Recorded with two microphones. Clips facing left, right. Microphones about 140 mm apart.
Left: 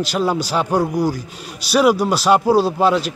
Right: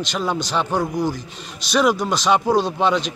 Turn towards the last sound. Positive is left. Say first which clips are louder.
# left 3 dB
turn(degrees=5)  # may be behind; listen again after turning